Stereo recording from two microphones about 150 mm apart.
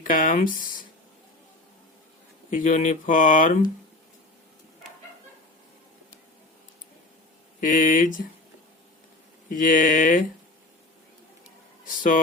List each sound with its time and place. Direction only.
0.0 s speech: 65° left (ahead or behind)
2.5 s speech: 60° left (ahead or behind)
7.6 s speech: 60° left (ahead or behind)
9.5 s speech: 65° left (ahead or behind)
11.9 s speech: 65° left (ahead or behind)